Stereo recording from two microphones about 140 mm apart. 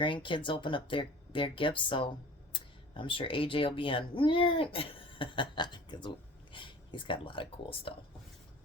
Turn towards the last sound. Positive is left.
turn(degrees=40)  # may be behind; listen again after turning